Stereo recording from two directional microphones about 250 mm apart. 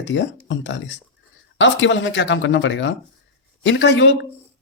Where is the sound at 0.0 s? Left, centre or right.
Left.